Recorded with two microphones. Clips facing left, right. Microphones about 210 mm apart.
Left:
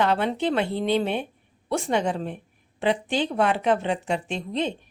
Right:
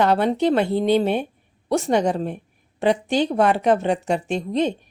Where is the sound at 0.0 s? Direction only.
40° right (ahead or behind).